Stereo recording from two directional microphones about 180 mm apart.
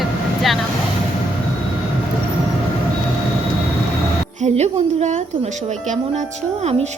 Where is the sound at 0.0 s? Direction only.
Centre (ahead or behind).